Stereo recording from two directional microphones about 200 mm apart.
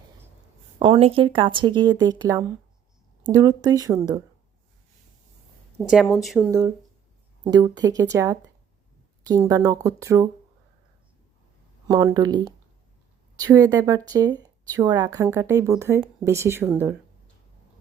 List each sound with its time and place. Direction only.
0.8 s speech: 25° right (ahead or behind)
5.9 s a woman's voice: centre (ahead or behind)
6.5 s speech: 20° right (ahead or behind)
7.8 s speech: 20° right (ahead or behind)
11.9 s speech: 20° right (ahead or behind)